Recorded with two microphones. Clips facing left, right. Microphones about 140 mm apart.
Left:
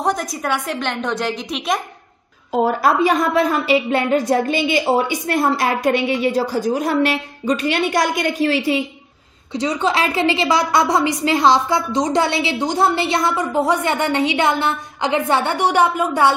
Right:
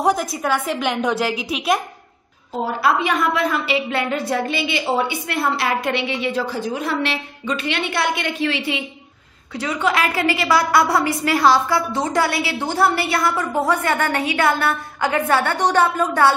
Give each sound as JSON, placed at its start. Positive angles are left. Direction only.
{"t": 0.0, "sound": "a woman's voice", "side_deg": -5}
{"t": 2.6, "sound": "a woman's voice", "side_deg": 40}
{"t": 9.5, "sound": "a woman's voice", "side_deg": 20}